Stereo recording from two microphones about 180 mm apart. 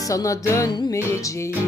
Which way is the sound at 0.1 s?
20° left (ahead or behind).